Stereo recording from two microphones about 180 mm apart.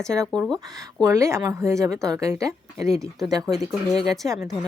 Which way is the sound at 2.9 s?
Centre (ahead or behind).